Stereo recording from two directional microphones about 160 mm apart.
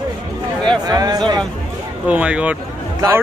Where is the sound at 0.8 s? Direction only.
25° right (ahead or behind).